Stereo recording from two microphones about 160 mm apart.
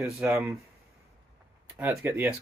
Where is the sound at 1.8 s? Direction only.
10° right (ahead or behind).